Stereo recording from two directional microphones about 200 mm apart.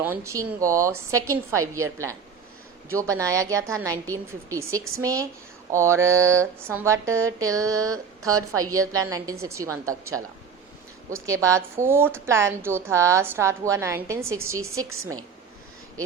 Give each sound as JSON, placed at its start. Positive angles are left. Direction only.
{"t": 0.0, "sound": "a woman's voice", "side_deg": -10}
{"t": 11.1, "sound": "a woman's voice", "side_deg": -15}
{"t": 14.8, "sound": "a woman's voice", "side_deg": -90}